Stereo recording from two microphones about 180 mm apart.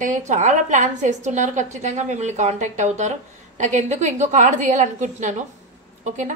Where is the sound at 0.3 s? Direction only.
40° right (ahead or behind).